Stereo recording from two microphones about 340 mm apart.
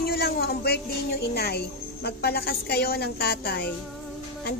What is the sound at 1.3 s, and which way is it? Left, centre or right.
Speech, left.